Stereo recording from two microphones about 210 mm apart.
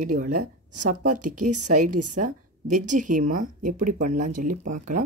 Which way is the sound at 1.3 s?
90° right.